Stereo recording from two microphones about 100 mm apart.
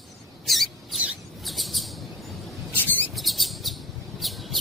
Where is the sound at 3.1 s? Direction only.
Centre (ahead or behind).